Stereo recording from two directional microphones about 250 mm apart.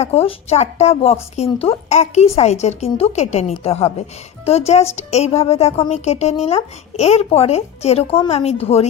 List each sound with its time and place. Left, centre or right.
0.0 s a woman's voice: left